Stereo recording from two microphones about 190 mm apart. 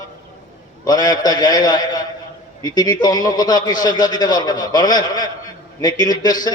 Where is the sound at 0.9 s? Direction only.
20° left (ahead or behind).